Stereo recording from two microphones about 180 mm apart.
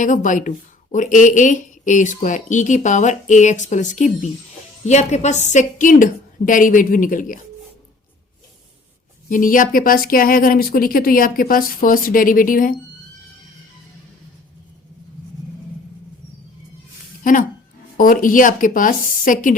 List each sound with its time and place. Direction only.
0.0 s speech: 45° left (ahead or behind)
9.3 s speech: 50° left (ahead or behind)
17.9 s speech: 50° left (ahead or behind)